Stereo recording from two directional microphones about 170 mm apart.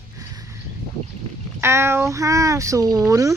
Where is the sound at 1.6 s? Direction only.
15° right (ahead or behind).